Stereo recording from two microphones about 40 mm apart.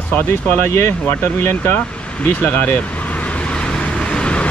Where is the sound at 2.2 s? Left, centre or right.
Left.